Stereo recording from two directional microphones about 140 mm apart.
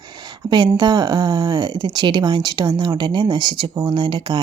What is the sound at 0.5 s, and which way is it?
A woman's voice, 30° right (ahead or behind).